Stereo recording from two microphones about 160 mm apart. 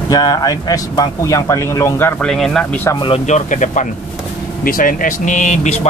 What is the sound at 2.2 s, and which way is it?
Speech, 5° left (ahead or behind).